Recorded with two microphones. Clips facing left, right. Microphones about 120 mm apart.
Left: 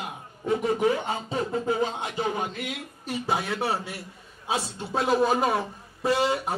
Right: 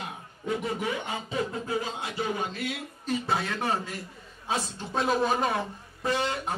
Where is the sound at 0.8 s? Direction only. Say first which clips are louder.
Left 7 dB; 35° left (ahead or behind).